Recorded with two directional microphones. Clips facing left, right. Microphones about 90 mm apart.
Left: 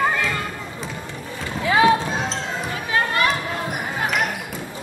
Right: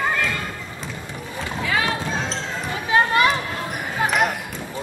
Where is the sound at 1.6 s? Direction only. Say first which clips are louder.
Left 8 dB; 20° left (ahead or behind).